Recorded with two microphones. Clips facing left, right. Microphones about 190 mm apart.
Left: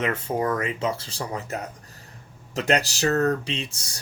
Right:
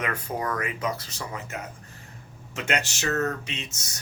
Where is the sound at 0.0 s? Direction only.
25° left (ahead or behind).